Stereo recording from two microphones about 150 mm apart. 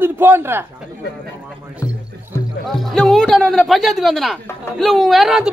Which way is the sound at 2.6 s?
Centre (ahead or behind).